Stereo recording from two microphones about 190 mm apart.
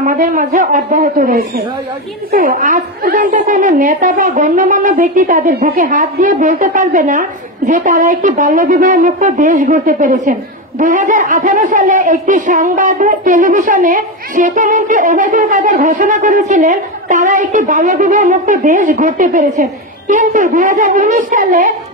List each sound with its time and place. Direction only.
0.0 s a woman's voice: 45° right (ahead or behind)